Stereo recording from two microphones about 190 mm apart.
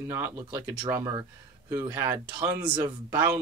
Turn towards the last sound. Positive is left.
turn(degrees=-10)  # may be behind; listen again after turning